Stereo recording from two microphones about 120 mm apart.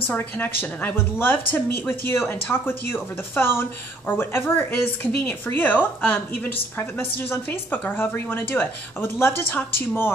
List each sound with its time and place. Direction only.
0.0 s speech: 15° left (ahead or behind)